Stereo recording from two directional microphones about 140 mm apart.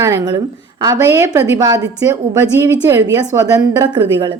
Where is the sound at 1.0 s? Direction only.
20° right (ahead or behind).